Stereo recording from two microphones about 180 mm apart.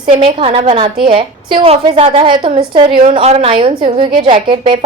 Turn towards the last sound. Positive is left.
turn(degrees=-30)  # may be behind; listen again after turning